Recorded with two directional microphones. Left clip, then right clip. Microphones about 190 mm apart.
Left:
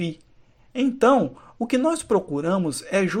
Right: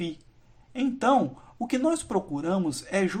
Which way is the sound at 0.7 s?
30° left (ahead or behind).